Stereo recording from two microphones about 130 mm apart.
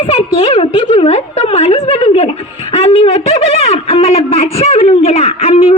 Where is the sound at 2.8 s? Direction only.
50° left (ahead or behind).